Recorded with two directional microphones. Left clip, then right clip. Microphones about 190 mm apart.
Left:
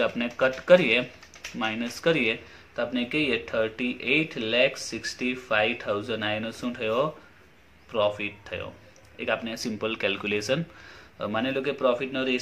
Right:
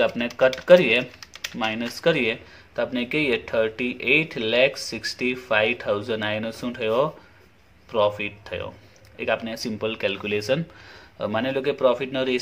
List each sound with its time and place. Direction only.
0.0 s speech: 30° right (ahead or behind)